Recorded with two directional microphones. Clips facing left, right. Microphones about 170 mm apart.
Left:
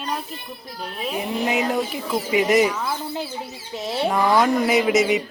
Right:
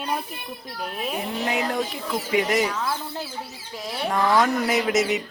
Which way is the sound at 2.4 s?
10° left (ahead or behind).